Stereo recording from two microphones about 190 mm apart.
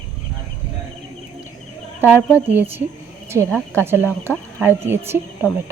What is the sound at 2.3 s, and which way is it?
Speech, 10° right (ahead or behind).